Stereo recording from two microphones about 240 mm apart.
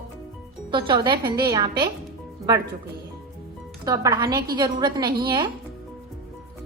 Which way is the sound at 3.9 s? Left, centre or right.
Centre.